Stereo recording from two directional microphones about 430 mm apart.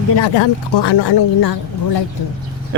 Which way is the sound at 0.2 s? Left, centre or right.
Left.